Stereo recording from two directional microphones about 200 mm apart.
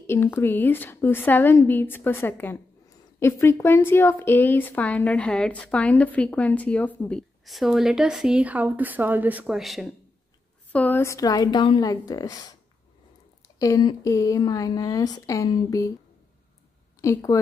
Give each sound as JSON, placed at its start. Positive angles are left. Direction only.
{"t": 0.0, "sound": "a woman's voice", "side_deg": 10}
{"t": 13.6, "sound": "a woman's voice", "side_deg": 20}
{"t": 17.0, "sound": "a woman's voice", "side_deg": 15}